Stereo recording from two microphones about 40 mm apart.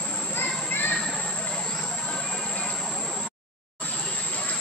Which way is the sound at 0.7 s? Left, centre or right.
Left.